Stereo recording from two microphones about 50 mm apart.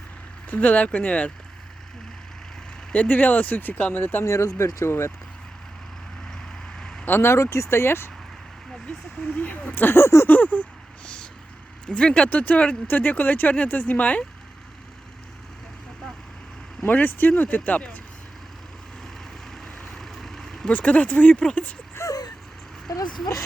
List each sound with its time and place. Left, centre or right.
0.5 s speech: left
2.9 s speech: left
4.3 s speech: left
6.2 s vehicle: centre
7.0 s speech: left
8.9 s speech: left
9.7 s speech: left
10.2 s a sound: left
11.9 s speech: centre
16.8 s speech: left
17.4 s speech: left
19.5 s vehicle: centre
20.7 s speech: left
22.0 s a sound: left